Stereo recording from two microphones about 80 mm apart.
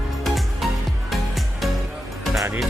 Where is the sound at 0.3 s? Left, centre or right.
Centre.